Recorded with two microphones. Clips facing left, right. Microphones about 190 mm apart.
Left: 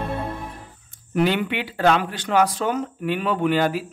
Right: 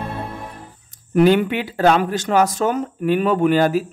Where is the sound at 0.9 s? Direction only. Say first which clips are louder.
Right 7 dB; 45° right (ahead or behind).